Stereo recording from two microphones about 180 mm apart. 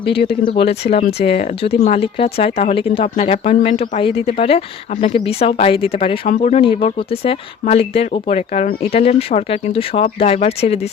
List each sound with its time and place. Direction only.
0.0 s speech: 30° left (ahead or behind)